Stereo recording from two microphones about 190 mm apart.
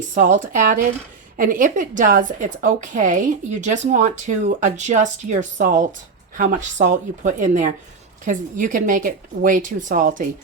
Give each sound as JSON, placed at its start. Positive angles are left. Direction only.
{"t": 0.1, "sound": "a woman's voice", "side_deg": -40}